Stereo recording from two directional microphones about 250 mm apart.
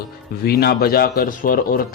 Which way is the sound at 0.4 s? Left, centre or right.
Left.